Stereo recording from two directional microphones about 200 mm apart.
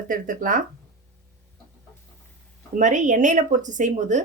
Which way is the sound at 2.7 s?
40° right (ahead or behind).